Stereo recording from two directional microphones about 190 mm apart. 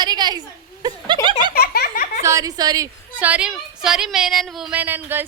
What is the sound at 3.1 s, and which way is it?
A woman's voice, 5° right (ahead or behind).